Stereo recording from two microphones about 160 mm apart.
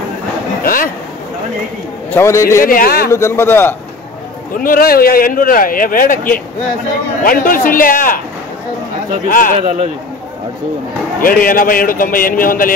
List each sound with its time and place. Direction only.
0.7 s a sound: 65° left (ahead or behind)
2.0 s a man's voice: 15° left (ahead or behind)
2.6 s speech: 60° left (ahead or behind)
3.1 s a man's voice: 15° left (ahead or behind)
4.6 s speech: 65° left (ahead or behind)
9.3 s speech: 60° left (ahead or behind)
9.6 s speech: 35° right (ahead or behind)
11.1 s speech: 60° left (ahead or behind)